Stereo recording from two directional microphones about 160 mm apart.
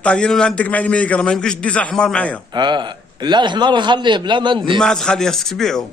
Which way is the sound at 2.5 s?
30° right (ahead or behind).